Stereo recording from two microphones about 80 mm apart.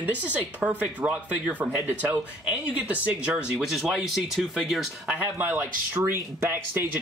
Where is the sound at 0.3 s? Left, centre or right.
Centre.